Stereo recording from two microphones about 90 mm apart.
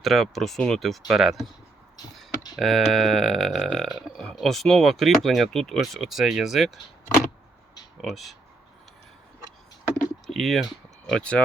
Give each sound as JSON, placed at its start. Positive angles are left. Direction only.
{"t": 0.0, "sound": "speech", "side_deg": 0}
{"t": 2.6, "sound": "speech", "side_deg": 0}
{"t": 8.0, "sound": "speech", "side_deg": 0}
{"t": 10.2, "sound": "speech", "side_deg": 0}